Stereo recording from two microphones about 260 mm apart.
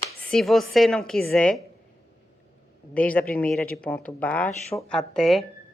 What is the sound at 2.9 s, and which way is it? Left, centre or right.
A woman's voice, centre.